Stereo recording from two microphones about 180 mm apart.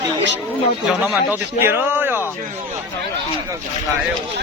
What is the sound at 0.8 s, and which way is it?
A man's voice, 5° right (ahead or behind).